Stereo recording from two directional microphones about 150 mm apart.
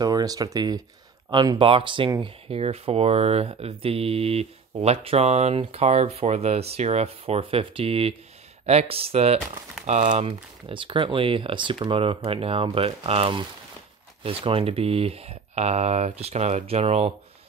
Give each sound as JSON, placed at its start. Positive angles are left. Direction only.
{"t": 0.0, "sound": "speech", "side_deg": -25}